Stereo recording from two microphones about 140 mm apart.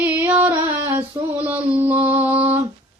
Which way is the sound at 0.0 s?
15° right (ahead or behind).